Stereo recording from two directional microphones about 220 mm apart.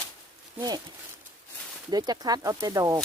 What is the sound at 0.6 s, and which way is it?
Speech, 20° right (ahead or behind).